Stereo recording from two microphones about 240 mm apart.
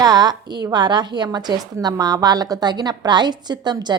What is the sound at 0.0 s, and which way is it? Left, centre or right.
A woman's voice, centre.